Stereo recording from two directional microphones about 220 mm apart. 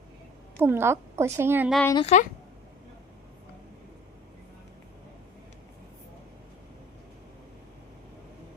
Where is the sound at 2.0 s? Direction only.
30° left (ahead or behind).